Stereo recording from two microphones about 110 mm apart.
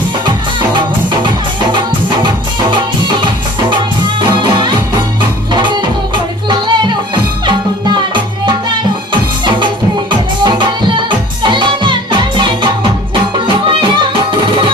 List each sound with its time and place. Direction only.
0.3 s music: 45° right (ahead or behind)
4.2 s music: 45° right (ahead or behind)
10.4 s music: 45° right (ahead or behind)